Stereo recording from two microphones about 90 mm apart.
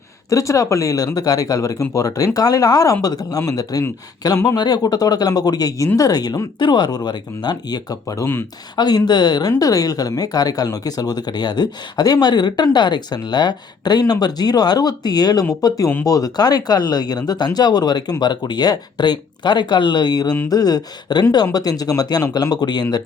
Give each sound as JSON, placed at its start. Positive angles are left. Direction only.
{"t": 0.3, "sound": "speech", "side_deg": 40}
{"t": 8.7, "sound": "speech", "side_deg": 50}
{"t": 9.5, "sound": "speech", "side_deg": 40}